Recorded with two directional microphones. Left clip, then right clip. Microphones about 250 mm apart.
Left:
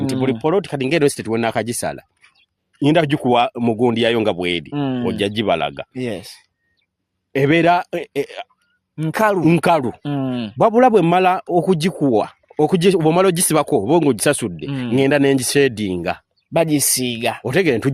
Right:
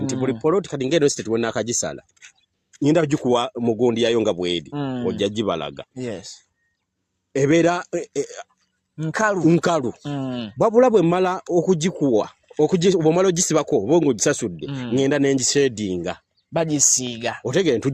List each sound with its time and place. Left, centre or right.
0.0 s speech: left
4.7 s speech: left
5.0 s speech: left
7.3 s speech: left
16.5 s speech: left